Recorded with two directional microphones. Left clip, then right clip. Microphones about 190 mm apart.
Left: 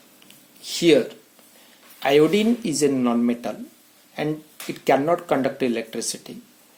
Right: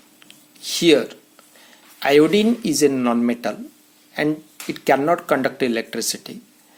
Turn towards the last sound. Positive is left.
turn(degrees=-30)  # may be behind; listen again after turning